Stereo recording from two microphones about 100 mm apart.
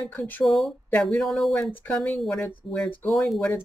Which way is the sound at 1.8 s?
15° left (ahead or behind).